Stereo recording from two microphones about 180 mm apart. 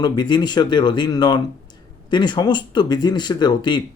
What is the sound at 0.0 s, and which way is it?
Speech, 25° left (ahead or behind).